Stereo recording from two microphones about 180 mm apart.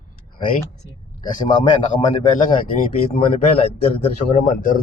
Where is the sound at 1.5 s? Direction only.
25° left (ahead or behind).